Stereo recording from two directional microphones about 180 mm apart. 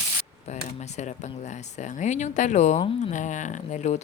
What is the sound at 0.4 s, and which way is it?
Speech, 40° left (ahead or behind).